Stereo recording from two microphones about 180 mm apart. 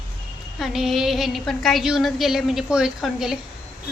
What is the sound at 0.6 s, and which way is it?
A woman's voice, centre (ahead or behind).